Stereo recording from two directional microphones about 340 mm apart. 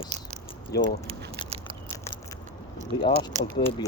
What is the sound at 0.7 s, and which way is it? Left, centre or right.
Speech, left.